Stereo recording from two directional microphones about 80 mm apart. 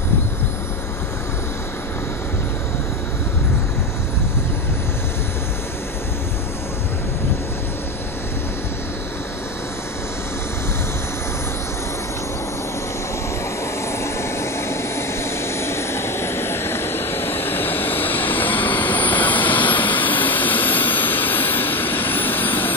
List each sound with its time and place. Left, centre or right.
13.9 s vehicle: left